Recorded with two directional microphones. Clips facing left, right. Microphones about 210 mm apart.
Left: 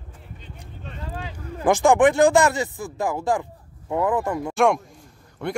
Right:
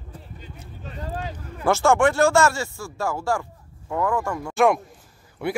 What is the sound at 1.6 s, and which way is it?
Speech, 15° left (ahead or behind).